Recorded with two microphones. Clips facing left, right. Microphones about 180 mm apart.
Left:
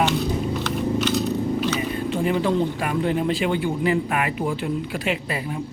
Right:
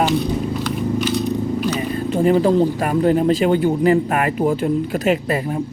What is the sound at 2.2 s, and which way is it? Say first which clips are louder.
Speech: right 7 dB; 40° right (ahead or behind).